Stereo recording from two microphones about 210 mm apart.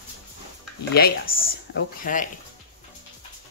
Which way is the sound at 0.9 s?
45° left (ahead or behind).